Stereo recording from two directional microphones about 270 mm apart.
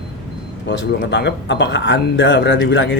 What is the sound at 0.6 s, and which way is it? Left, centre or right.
Speech, left.